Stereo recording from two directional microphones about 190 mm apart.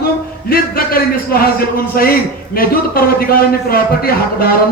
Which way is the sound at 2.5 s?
50° left (ahead or behind).